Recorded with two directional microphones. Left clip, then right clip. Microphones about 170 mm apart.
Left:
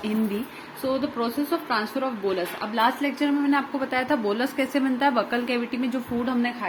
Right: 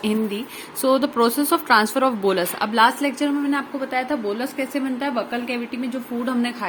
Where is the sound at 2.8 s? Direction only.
25° right (ahead or behind).